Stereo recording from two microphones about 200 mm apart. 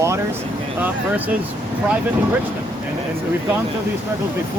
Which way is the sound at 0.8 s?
10° right (ahead or behind).